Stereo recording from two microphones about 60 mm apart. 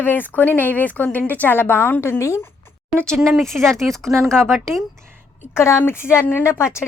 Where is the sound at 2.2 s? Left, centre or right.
Left.